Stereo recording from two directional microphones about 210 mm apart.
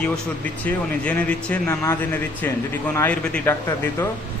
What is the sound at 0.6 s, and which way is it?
Speech, 5° left (ahead or behind).